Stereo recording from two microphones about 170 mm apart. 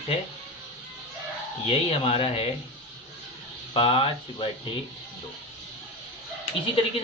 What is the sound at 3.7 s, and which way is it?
Speech, 30° left (ahead or behind).